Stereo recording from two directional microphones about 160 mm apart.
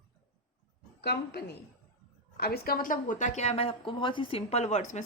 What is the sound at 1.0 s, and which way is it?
Speech, 90° left.